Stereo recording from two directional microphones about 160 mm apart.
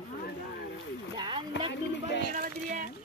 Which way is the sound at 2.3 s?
55° right (ahead or behind).